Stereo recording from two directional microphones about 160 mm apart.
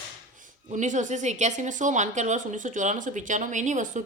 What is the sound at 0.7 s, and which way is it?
A woman's voice, 50° right (ahead or behind).